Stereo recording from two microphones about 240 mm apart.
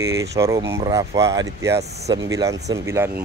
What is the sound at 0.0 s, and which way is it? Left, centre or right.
Speech, centre.